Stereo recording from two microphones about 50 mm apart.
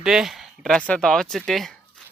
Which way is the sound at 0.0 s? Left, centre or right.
Centre.